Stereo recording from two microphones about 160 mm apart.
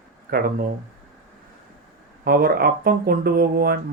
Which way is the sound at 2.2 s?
70° right (ahead or behind).